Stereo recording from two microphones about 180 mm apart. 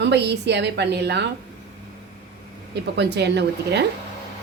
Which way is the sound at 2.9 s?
70° right (ahead or behind).